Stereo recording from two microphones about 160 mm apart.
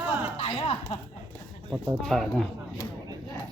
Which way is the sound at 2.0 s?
Centre (ahead or behind).